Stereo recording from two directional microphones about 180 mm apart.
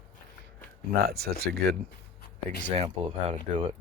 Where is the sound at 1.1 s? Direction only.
60° right (ahead or behind).